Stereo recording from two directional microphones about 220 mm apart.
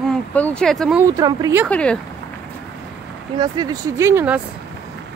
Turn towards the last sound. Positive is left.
turn(degrees=-10)  # may be behind; listen again after turning